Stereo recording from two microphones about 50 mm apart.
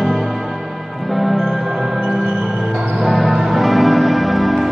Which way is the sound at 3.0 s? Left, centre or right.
Centre.